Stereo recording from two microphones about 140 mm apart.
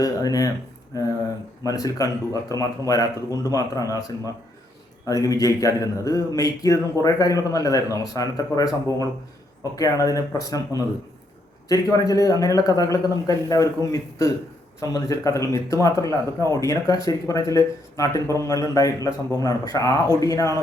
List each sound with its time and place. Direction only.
0.0 s speech: 25° left (ahead or behind)
5.0 s speech: 25° left (ahead or behind)